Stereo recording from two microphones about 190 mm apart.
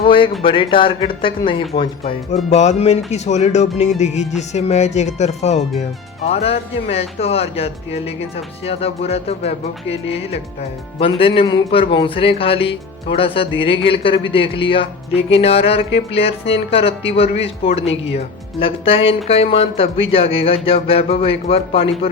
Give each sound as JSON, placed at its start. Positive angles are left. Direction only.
{"t": 0.0, "sound": "a man's voice", "side_deg": 25}